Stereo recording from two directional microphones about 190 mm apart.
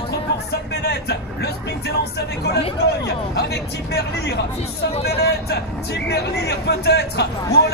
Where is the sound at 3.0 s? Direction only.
60° left (ahead or behind).